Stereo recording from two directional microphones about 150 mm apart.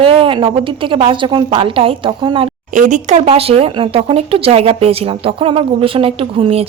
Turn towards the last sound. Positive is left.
turn(degrees=-40)  # may be behind; listen again after turning